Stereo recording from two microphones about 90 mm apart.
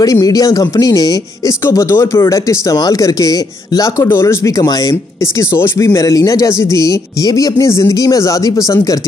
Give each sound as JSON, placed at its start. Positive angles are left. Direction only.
{"t": 0.0, "sound": "speech", "side_deg": 40}
{"t": 1.7, "sound": "speech", "side_deg": 35}
{"t": 4.1, "sound": "speech", "side_deg": 30}
{"t": 4.5, "sound": "speech", "side_deg": 40}
{"t": 5.4, "sound": "speech", "side_deg": 30}